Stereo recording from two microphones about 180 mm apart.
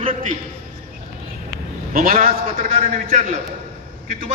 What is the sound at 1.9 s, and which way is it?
A man's voice, 55° right (ahead or behind).